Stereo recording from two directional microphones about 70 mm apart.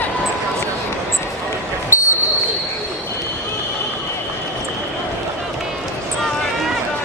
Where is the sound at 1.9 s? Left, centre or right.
Left.